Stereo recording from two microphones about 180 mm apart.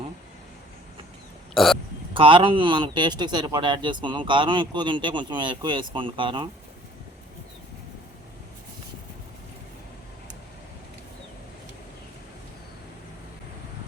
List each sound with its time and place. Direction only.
1.5 s speech: centre (ahead or behind)
2.1 s a man's voice: 30° right (ahead or behind)